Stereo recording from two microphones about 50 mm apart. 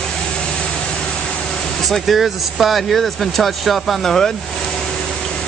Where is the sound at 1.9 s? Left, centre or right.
Centre.